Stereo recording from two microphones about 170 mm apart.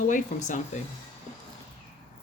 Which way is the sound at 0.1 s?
45° left (ahead or behind).